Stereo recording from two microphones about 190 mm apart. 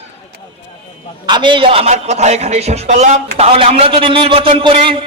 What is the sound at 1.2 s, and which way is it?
Speech, 25° right (ahead or behind).